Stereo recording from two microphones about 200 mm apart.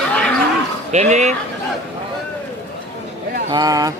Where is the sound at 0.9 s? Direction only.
35° right (ahead or behind).